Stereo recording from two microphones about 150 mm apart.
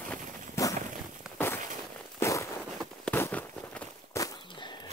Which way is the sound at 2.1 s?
20° left (ahead or behind).